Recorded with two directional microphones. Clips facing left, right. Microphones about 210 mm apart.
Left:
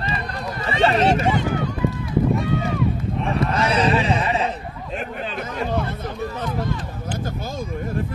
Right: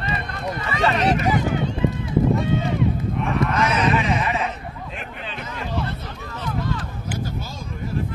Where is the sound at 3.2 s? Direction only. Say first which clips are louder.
Even; 30° left (ahead or behind); by 7.9 s 50° left (ahead or behind).